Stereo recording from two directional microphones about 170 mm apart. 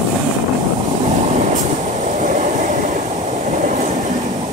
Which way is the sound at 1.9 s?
45° right (ahead or behind).